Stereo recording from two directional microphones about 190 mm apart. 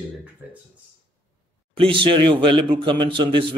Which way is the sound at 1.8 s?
25° right (ahead or behind).